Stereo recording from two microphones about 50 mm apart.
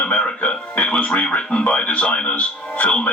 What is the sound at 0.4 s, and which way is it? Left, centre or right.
Speech, centre.